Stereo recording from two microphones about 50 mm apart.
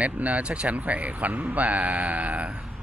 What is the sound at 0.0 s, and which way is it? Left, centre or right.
A man's voice, right.